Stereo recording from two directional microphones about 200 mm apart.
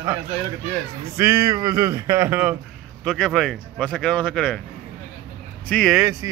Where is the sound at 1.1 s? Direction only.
15° right (ahead or behind).